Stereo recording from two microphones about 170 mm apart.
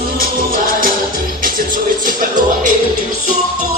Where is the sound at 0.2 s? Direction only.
55° right (ahead or behind).